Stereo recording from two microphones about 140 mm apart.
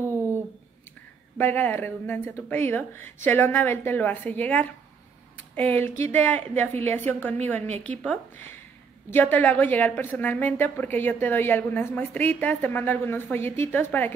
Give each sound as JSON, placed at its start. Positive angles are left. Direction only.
{"t": 0.0, "sound": "a sound", "side_deg": -20}
{"t": 1.4, "sound": "a woman's voice", "side_deg": 15}
{"t": 6.7, "sound": "a woman's voice", "side_deg": -50}
{"t": 7.0, "sound": "a woman's voice", "side_deg": 15}
{"t": 9.1, "sound": "a woman's voice", "side_deg": 15}